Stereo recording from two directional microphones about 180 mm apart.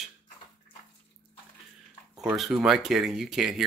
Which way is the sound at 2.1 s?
Centre (ahead or behind).